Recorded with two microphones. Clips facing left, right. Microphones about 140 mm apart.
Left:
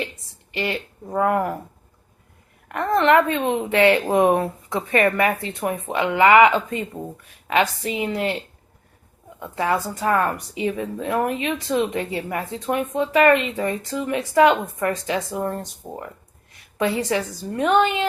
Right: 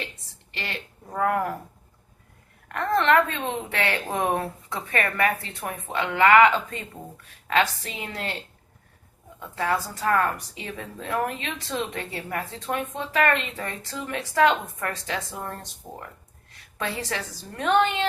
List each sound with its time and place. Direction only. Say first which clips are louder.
0.5 s speech: left 9 dB; 10° left (ahead or behind)
2.6 s speech: left 4 dB; 15° left (ahead or behind)
9.6 s a woman's voice: left 4 dB; 20° left (ahead or behind)
16.7 s speech: left 9 dB; 15° left (ahead or behind)